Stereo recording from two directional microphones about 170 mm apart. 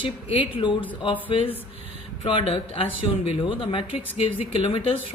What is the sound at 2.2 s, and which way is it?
Speech, 35° left (ahead or behind).